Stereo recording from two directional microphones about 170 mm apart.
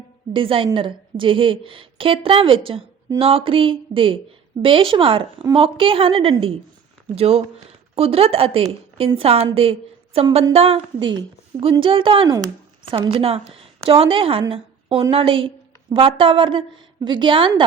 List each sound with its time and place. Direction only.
0.3 s a woman's voice: 30° right (ahead or behind)
14.5 s a sound: 30° right (ahead or behind)
15.1 s a woman's voice: 30° right (ahead or behind)